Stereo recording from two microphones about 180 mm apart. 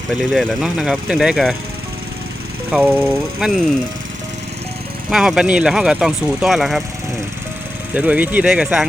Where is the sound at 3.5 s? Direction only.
50° right (ahead or behind).